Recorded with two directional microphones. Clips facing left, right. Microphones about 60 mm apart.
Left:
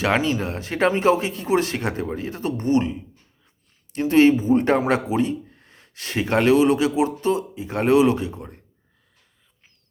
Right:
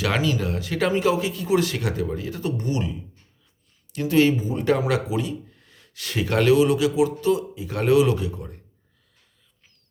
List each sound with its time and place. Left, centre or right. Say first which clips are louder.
0.0 s speech: left 2 dB; left